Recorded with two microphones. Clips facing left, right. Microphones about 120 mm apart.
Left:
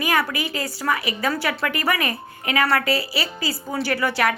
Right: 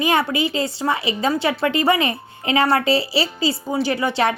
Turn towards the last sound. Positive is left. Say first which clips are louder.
# right 2 dB
turn(degrees=-25)  # may be behind; listen again after turning